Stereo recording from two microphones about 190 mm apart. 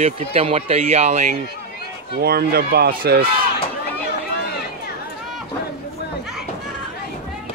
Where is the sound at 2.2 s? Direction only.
55° right (ahead or behind).